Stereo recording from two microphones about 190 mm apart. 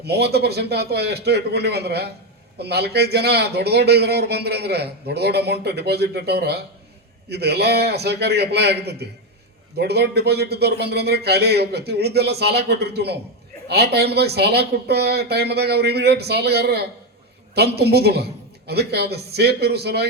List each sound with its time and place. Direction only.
0.0 s a man's voice: 60° right (ahead or behind)